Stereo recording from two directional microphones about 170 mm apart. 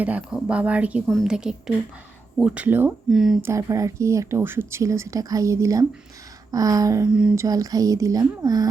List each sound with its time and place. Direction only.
0.0 s a woman's voice: 10° right (ahead or behind)
3.4 s speech: 15° right (ahead or behind)
7.1 s a woman's voice: 5° right (ahead or behind)
7.3 s speech: 20° right (ahead or behind)